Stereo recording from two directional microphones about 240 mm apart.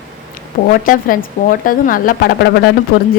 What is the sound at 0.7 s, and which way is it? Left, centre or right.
A woman's voice, left.